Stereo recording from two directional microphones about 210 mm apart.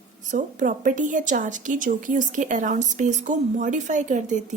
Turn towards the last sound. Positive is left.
turn(degrees=-35)  # may be behind; listen again after turning